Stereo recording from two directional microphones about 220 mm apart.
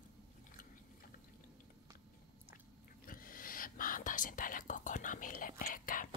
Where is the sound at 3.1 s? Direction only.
40° left (ahead or behind).